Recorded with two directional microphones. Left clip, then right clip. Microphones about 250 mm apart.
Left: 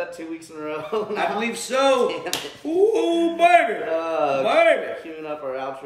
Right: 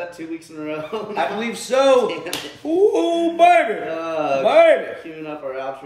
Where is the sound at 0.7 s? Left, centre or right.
Centre.